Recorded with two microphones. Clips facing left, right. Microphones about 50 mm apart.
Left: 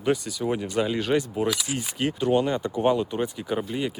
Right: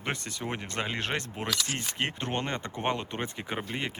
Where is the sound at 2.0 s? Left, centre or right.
Right.